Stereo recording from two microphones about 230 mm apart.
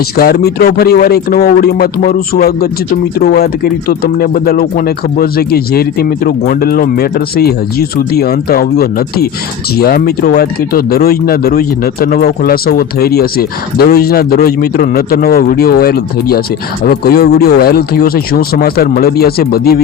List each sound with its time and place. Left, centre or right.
0.2 s speech: left